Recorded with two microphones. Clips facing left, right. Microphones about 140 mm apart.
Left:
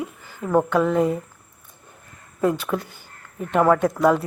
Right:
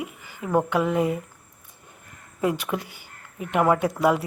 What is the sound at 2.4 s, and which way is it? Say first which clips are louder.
Speech: left 3 dB; 10° right (ahead or behind).